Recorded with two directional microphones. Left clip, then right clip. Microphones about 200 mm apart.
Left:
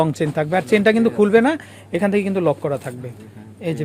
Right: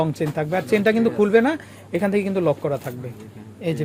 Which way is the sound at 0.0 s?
20° left (ahead or behind).